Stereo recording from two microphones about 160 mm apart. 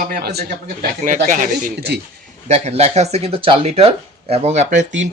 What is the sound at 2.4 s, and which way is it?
Speech, 45° right (ahead or behind).